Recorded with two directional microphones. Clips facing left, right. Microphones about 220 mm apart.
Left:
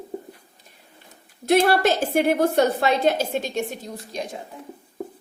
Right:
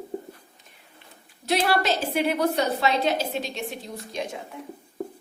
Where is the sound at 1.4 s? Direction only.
50° left (ahead or behind).